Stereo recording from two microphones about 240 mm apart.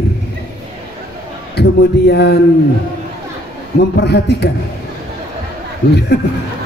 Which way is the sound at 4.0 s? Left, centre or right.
Left.